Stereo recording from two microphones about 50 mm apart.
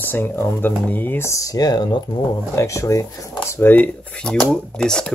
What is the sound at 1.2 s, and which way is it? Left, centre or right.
Speech, left.